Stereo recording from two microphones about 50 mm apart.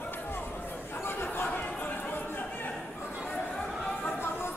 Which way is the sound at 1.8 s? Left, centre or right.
Left.